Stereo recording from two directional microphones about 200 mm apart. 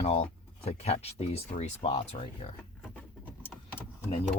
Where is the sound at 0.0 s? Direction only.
30° left (ahead or behind).